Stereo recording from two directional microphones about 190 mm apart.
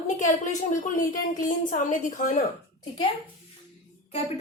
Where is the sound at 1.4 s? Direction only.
40° left (ahead or behind).